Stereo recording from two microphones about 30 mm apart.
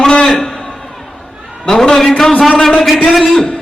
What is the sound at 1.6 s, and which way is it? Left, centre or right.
A man's voice, centre.